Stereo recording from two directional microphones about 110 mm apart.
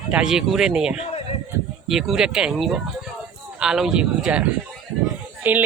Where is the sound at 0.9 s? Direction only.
70° left (ahead or behind).